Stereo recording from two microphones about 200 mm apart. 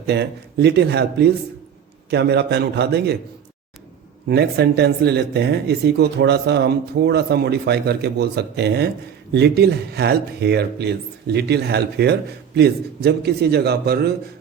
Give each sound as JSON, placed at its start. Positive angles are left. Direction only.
{"t": 0.1, "sound": "speech", "side_deg": -55}
{"t": 4.3, "sound": "a man's voice", "side_deg": -55}